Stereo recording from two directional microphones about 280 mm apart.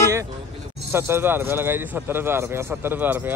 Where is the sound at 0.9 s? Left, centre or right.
Centre.